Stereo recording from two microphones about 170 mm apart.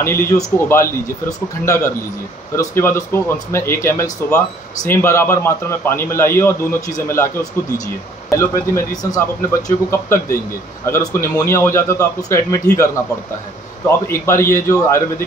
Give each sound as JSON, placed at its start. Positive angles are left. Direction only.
{"t": 0.0, "sound": "a man's voice", "side_deg": 15}